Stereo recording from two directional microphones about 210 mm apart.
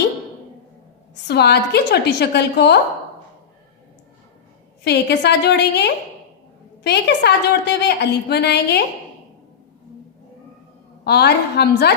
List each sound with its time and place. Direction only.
1.1 s a woman's voice: 50° left (ahead or behind)
4.8 s a woman's voice: 50° left (ahead or behind)
11.0 s a woman's voice: 50° left (ahead or behind)